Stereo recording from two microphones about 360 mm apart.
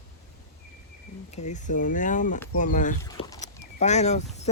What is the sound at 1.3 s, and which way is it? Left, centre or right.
Speech, centre.